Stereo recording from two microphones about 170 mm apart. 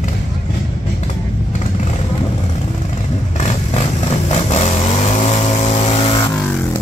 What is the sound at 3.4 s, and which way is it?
Vehicle, 40° left (ahead or behind).